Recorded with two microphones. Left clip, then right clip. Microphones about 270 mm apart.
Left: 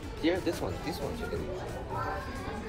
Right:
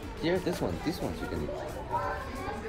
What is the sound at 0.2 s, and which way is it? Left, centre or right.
Speech, right.